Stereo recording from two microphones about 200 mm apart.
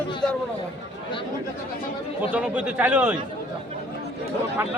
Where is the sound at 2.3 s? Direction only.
5° right (ahead or behind).